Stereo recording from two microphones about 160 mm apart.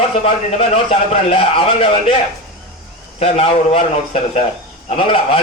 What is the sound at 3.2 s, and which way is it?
A man's voice, 40° left (ahead or behind).